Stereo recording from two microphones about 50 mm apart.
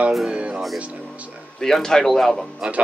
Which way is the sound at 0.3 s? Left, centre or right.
Right.